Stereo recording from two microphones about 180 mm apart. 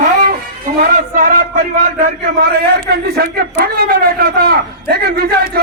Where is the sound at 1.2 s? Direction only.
50° right (ahead or behind).